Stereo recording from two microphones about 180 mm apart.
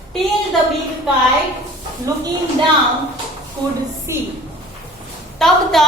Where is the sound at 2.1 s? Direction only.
20° right (ahead or behind).